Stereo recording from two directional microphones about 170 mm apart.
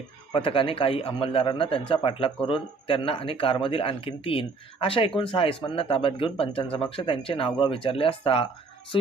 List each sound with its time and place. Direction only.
0.3 s speech: 30° left (ahead or behind)